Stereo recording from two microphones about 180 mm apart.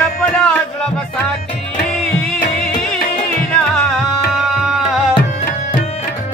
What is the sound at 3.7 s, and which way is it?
Music, 5° left (ahead or behind).